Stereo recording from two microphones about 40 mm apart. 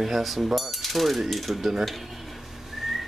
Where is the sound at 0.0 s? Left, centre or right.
Centre.